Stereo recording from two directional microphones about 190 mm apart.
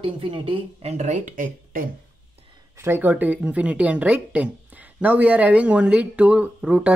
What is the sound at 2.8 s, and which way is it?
Speech, 10° right (ahead or behind).